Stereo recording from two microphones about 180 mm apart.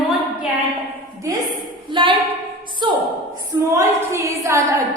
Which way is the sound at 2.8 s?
25° right (ahead or behind).